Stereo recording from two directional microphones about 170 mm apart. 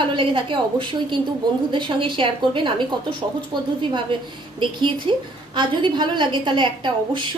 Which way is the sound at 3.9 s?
30° right (ahead or behind).